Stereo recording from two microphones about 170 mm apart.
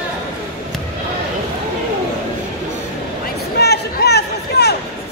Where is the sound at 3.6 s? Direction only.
75° left (ahead or behind).